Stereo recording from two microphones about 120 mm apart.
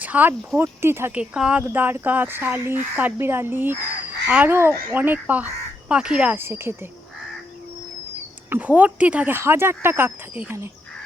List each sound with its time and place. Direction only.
0.0 s speech: 15° right (ahead or behind)
1.2 s speech: 10° right (ahead or behind)
6.3 s speech: 20° right (ahead or behind)
8.4 s speech: 10° right (ahead or behind)